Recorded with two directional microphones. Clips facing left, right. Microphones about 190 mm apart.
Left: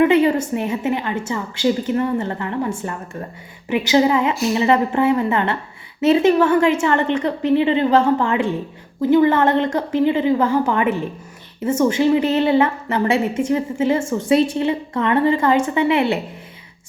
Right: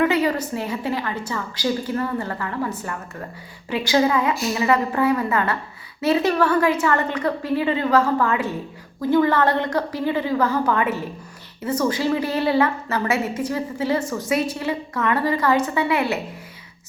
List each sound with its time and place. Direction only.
0.0 s a woman's voice: 25° left (ahead or behind)